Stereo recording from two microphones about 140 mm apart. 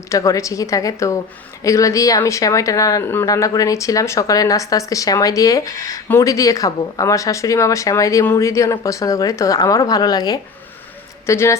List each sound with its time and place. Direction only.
0.1 s speech: 20° left (ahead or behind)